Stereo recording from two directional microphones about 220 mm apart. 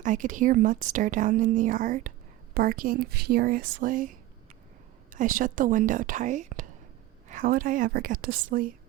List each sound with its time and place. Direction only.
0.0 s a woman's voice: 35° right (ahead or behind)
5.1 s a woman's voice: 35° right (ahead or behind)